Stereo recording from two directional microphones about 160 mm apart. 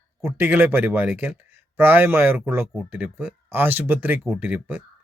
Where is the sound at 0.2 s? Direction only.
15° right (ahead or behind).